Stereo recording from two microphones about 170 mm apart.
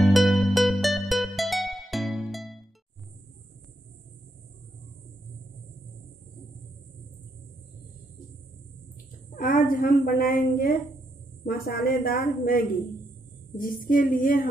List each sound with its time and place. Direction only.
0.0 s music: centre (ahead or behind)
9.3 s a woman's voice: 55° left (ahead or behind)